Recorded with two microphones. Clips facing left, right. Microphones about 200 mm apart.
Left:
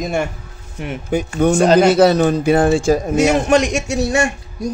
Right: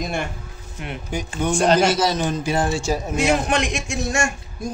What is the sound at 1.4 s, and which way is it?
A man's voice, 55° left (ahead or behind).